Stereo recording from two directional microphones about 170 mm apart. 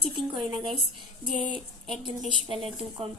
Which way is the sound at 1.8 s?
30° right (ahead or behind).